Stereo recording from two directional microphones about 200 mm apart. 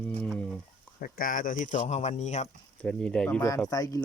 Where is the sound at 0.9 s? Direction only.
45° left (ahead or behind).